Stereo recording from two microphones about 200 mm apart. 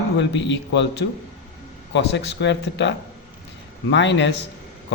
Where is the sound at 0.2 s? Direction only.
60° left (ahead or behind).